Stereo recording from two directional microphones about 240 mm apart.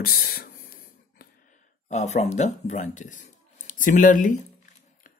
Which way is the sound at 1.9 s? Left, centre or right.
Left.